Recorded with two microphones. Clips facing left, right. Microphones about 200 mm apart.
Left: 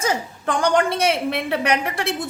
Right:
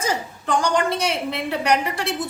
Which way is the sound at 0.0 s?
55° left (ahead or behind).